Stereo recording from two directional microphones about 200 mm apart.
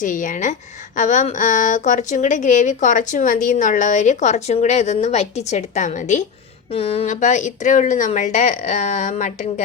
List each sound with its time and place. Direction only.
0.0 s speech: 40° left (ahead or behind)